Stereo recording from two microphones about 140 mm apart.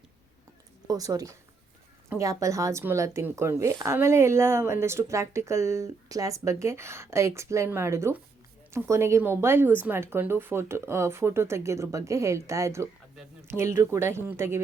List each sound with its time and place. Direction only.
0.9 s speech: 25° right (ahead or behind)